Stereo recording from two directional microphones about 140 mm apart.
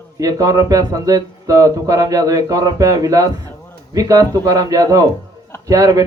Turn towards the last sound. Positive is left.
turn(degrees=-25)  # may be behind; listen again after turning